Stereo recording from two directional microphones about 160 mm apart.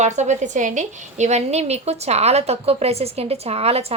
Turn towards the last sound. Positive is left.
turn(degrees=-40)  # may be behind; listen again after turning